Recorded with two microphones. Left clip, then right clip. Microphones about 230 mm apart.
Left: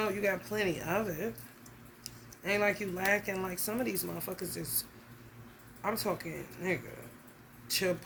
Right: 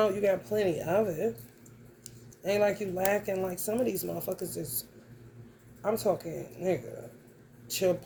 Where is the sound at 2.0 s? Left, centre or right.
Left.